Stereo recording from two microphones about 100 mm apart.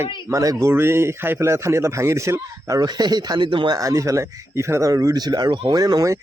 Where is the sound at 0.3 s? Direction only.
35° right (ahead or behind); by 3.8 s 55° right (ahead or behind).